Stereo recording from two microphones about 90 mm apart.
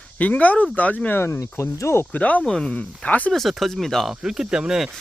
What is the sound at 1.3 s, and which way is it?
Speech, 35° left (ahead or behind).